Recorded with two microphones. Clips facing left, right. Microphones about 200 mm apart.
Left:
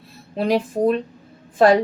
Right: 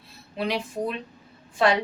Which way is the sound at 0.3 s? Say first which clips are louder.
Left 8 dB; 45° left (ahead or behind).